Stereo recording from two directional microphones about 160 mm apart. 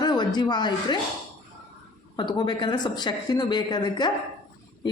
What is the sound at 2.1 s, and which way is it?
Speech, 30° left (ahead or behind).